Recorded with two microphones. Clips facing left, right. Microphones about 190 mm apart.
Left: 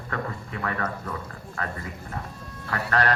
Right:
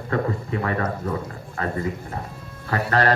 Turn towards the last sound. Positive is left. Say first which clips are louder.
# right 4 dB
turn(degrees=-35)  # may be behind; listen again after turning